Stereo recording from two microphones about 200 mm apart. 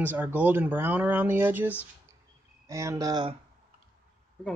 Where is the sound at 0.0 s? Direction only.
10° right (ahead or behind).